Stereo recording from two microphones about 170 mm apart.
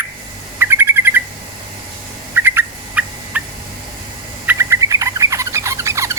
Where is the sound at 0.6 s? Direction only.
15° right (ahead or behind).